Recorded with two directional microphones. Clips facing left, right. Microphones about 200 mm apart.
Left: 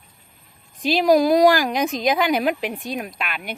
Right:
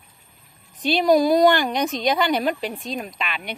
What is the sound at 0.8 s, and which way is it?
Speech, centre (ahead or behind).